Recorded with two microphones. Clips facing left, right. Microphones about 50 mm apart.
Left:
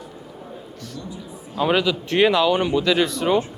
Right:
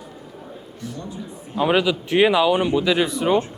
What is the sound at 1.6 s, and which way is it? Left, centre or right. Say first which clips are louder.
Speech: right 1 dB; centre.